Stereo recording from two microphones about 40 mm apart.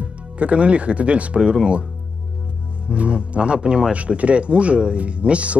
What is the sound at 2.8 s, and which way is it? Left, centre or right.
Speech, right.